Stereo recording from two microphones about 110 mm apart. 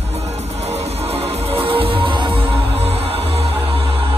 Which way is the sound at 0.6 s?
75° right (ahead or behind).